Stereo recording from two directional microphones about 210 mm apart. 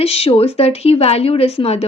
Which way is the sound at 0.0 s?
30° left (ahead or behind).